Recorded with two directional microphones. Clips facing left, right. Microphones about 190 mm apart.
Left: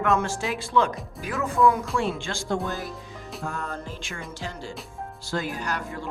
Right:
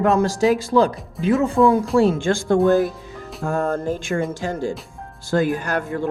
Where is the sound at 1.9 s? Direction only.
40° right (ahead or behind).